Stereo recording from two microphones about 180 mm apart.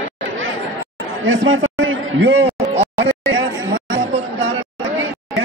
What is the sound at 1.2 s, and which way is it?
A man's voice, 90° right.